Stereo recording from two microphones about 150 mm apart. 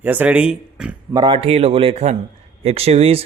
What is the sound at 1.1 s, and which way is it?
Speech, 30° right (ahead or behind).